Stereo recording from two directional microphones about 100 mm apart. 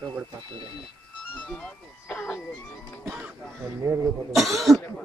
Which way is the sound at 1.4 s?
10° left (ahead or behind).